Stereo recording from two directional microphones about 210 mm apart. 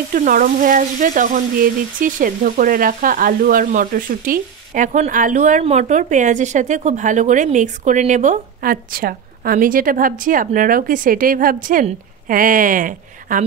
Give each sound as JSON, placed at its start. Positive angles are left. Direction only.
{"t": 0.1, "sound": "frying", "side_deg": -40}